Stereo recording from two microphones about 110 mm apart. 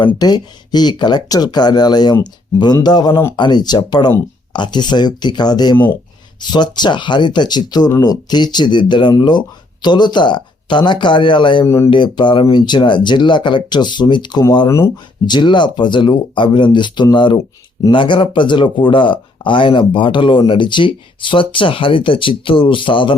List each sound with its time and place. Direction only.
0.2 s speech: 40° left (ahead or behind)
5.7 s speech: 15° left (ahead or behind)
6.4 s speech: 40° left (ahead or behind)
11.6 s speech: 30° left (ahead or behind)
11.9 s speech: 45° left (ahead or behind)